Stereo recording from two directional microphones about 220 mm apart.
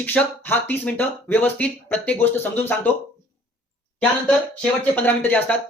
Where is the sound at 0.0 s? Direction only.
10° left (ahead or behind).